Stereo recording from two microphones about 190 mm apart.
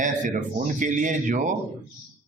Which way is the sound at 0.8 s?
40° right (ahead or behind).